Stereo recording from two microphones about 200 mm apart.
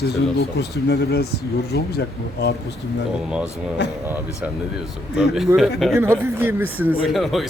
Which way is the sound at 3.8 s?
60° left (ahead or behind).